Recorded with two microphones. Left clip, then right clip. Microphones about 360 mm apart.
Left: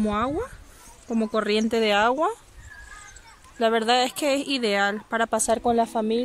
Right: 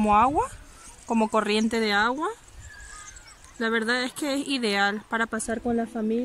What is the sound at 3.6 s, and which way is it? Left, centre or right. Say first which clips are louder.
Speech: left 5 dB; centre.